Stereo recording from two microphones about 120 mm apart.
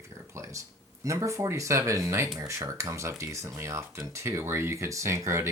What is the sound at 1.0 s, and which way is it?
Speech, 25° right (ahead or behind).